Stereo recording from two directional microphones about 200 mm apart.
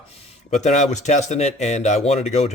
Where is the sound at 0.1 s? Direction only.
35° left (ahead or behind).